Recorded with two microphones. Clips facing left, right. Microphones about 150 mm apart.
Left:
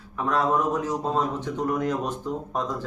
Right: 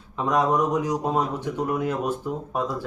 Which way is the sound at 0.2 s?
15° right (ahead or behind).